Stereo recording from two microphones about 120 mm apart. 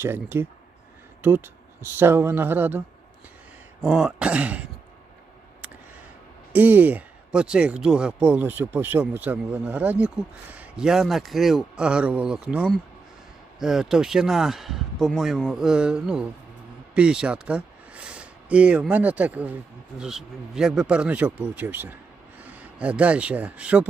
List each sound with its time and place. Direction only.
0.0 s speech: 20° right (ahead or behind)
6.5 s speech: 15° right (ahead or behind)